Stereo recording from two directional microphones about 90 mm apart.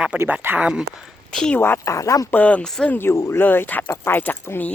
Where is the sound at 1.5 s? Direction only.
25° left (ahead or behind).